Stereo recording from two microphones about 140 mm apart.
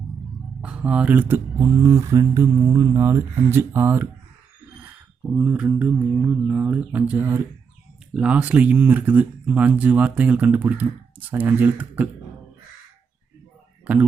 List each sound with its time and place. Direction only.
0.6 s speech: 10° right (ahead or behind)
5.3 s speech: 10° right (ahead or behind)